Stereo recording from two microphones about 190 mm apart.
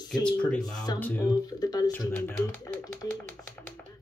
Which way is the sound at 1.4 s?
20° left (ahead or behind).